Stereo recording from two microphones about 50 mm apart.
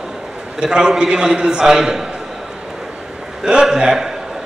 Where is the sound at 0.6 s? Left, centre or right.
Centre.